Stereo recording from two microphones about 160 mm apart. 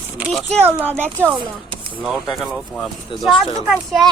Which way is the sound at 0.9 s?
10° right (ahead or behind).